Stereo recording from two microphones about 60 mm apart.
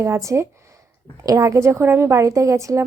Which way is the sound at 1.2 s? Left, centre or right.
Right.